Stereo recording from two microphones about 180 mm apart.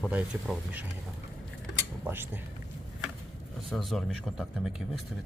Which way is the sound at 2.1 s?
10° right (ahead or behind).